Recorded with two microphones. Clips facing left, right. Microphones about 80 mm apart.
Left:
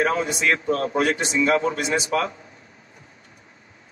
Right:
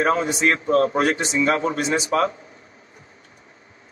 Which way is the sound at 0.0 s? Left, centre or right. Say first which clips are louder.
Right 2 dB; right.